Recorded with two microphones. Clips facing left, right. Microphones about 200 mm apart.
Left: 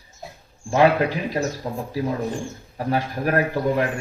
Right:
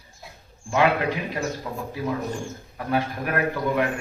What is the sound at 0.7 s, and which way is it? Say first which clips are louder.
Speech: left 4 dB; 35° left (ahead or behind).